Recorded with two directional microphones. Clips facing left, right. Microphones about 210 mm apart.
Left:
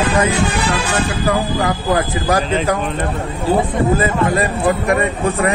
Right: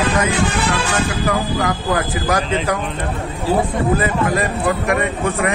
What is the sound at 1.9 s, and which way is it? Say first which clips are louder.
Speech: left 4 dB; 30° left (ahead or behind).